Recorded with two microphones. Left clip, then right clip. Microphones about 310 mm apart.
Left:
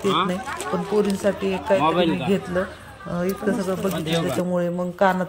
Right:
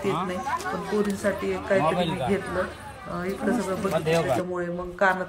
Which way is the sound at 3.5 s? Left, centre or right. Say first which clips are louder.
Right 1 dB; left.